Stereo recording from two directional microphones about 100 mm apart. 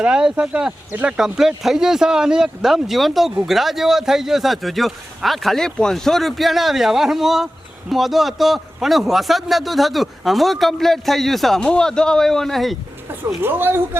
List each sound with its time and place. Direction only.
0.0 s a man's voice: 5° right (ahead or behind)
13.1 s speech: 20° right (ahead or behind)